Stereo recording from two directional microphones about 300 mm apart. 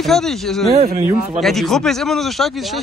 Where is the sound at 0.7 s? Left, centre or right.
Right.